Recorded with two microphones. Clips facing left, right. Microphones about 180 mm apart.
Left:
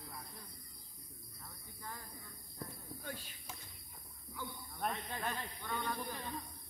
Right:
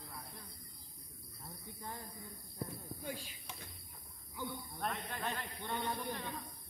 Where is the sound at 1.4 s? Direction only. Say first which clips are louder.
Right 3 dB; 20° right (ahead or behind).